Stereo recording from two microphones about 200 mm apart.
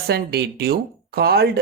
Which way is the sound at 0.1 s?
55° right (ahead or behind).